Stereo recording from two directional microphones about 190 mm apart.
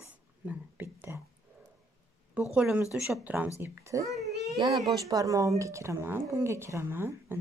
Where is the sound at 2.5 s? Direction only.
5° right (ahead or behind).